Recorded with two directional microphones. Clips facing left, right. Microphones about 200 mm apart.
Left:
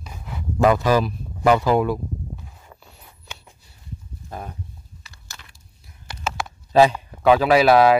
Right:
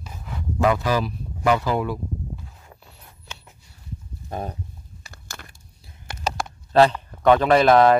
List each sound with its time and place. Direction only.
0.6 s speech: 45° left (ahead or behind)
4.3 s speech: 30° right (ahead or behind)
5.0 s a sound: 50° right (ahead or behind)
6.7 s speech: 10° left (ahead or behind)